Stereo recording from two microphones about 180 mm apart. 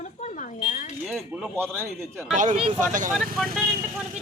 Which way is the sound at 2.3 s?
45° right (ahead or behind).